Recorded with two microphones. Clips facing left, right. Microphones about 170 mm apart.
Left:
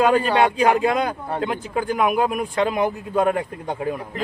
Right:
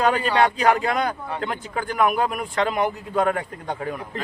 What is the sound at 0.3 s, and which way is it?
A man's voice, 15° left (ahead or behind).